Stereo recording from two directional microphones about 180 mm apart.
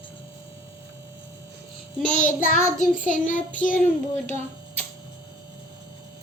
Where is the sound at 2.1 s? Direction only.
45° left (ahead or behind).